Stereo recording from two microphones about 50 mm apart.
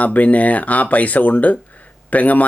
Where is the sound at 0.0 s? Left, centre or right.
Left.